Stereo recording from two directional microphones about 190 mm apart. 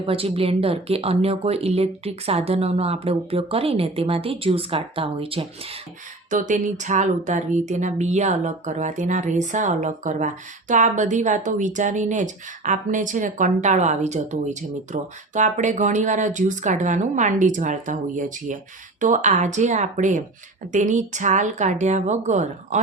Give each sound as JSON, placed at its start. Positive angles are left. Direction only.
{"t": 0.0, "sound": "speech", "side_deg": -30}
{"t": 6.3, "sound": "speech", "side_deg": -40}